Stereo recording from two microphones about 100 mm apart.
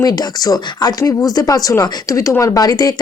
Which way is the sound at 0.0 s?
40° left (ahead or behind).